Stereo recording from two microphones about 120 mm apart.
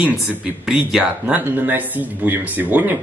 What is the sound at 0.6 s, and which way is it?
Speech, 5° right (ahead or behind).